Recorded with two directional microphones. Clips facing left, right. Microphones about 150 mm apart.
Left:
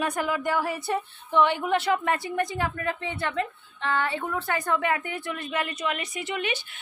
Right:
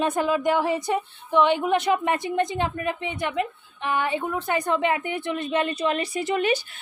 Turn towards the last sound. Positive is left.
turn(degrees=-40)  # may be behind; listen again after turning